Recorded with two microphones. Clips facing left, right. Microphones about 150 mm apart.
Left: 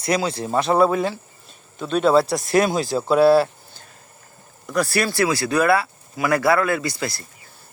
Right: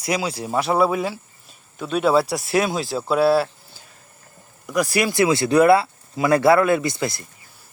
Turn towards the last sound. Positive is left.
turn(degrees=-20)  # may be behind; listen again after turning